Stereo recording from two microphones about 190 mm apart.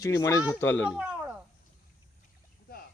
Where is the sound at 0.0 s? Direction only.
15° left (ahead or behind).